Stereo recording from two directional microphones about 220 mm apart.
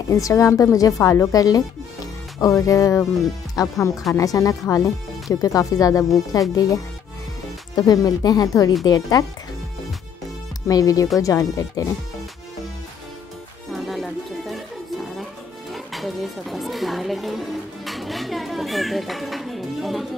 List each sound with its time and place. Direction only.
0.1 s speech: 15° left (ahead or behind)
10.7 s speech: 15° left (ahead or behind)
13.7 s music: centre (ahead or behind)